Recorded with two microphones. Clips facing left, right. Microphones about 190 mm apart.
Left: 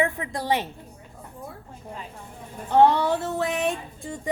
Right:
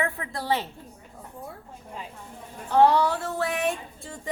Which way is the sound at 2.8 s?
20° left (ahead or behind).